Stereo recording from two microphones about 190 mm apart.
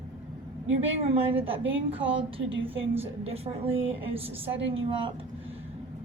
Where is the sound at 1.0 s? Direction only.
30° right (ahead or behind).